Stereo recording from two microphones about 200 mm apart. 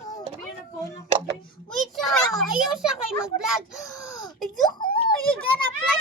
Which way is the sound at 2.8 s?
5° right (ahead or behind).